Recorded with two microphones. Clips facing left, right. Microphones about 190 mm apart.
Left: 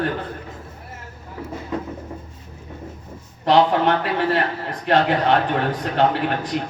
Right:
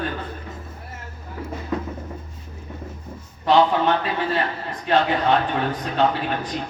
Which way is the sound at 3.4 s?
65° left (ahead or behind).